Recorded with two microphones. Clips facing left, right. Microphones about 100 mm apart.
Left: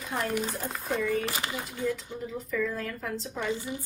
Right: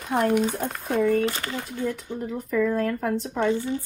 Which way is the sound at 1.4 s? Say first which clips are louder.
Right 3 dB; 25° left (ahead or behind).